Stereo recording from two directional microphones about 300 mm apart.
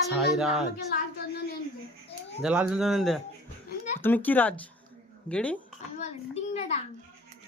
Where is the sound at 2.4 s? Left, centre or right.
Centre.